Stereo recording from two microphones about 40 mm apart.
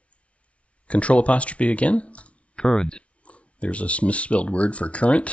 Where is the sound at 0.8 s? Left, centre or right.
Left.